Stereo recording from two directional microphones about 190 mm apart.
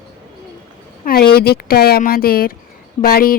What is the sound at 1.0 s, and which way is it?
Speech, 50° left (ahead or behind).